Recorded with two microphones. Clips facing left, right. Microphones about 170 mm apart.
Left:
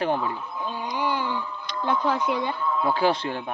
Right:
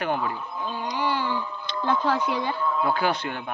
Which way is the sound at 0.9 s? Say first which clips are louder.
Even; 15° left (ahead or behind).